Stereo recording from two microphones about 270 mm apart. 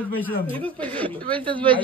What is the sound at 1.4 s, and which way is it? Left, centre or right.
Speech, centre.